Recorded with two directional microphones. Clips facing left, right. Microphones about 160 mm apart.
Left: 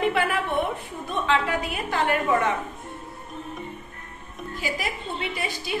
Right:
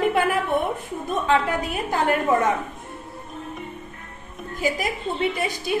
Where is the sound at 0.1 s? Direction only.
45° right (ahead or behind).